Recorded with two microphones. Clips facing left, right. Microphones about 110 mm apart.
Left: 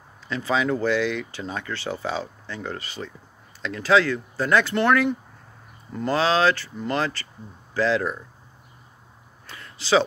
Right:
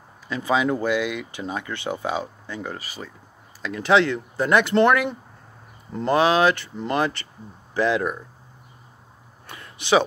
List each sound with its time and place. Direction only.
0.3 s speech: 15° right (ahead or behind)
9.5 s speech: 20° right (ahead or behind)